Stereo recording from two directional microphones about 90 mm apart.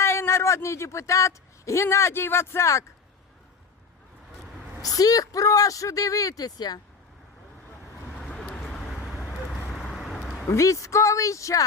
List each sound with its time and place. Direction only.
0.0 s speech: 30° left (ahead or behind)
4.8 s speech: 40° left (ahead or behind)
8.2 s vehicle: 5° left (ahead or behind)
9.6 s vehicle: centre (ahead or behind)
10.5 s speech: 35° left (ahead or behind)